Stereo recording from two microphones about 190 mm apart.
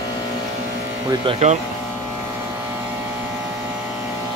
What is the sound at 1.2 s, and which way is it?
Speech, 30° right (ahead or behind).